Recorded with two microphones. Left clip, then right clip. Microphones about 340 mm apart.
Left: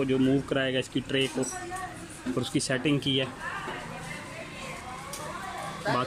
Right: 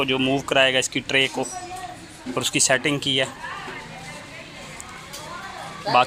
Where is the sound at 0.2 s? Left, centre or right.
Centre.